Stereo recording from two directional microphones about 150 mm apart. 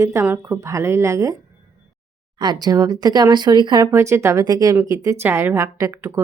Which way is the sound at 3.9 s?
20° right (ahead or behind).